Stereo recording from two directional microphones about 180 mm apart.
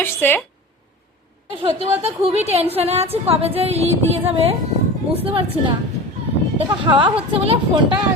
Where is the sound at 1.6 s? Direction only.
35° right (ahead or behind).